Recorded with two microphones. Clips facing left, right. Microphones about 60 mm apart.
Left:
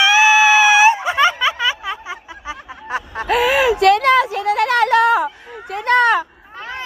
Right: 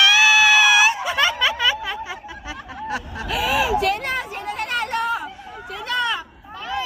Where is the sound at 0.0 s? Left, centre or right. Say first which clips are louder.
Left 3 dB; left.